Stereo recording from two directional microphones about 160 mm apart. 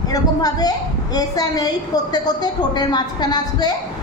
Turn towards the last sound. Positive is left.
turn(degrees=25)  # may be behind; listen again after turning